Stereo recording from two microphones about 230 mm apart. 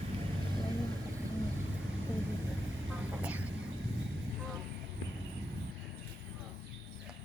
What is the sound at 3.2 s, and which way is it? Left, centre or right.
Vehicle, centre.